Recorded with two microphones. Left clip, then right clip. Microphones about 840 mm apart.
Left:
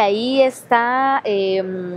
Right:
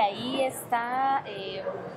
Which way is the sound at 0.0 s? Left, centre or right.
Left.